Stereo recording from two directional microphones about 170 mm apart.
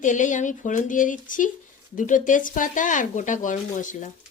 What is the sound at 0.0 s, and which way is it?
Speech, 50° left (ahead or behind).